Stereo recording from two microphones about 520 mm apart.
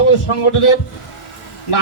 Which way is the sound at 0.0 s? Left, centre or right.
Left.